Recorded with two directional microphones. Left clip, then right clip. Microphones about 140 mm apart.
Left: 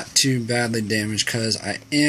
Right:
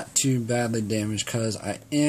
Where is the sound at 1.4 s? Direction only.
40° right (ahead or behind).